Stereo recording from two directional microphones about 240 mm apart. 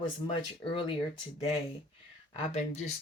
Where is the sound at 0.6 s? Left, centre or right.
Left.